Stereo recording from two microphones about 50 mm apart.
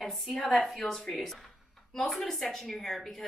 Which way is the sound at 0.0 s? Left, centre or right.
Centre.